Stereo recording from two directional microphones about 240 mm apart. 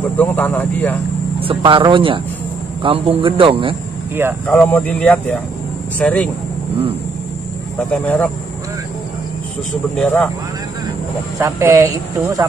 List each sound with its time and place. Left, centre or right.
0.2 s speech: centre
1.4 s a man's voice: right
4.5 s speech: centre
7.9 s speech: centre
9.9 s speech: centre
11.3 s speech: centre